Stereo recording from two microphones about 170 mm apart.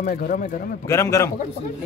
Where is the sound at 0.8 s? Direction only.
15° left (ahead or behind).